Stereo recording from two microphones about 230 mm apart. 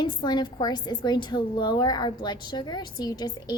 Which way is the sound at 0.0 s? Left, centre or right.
Centre.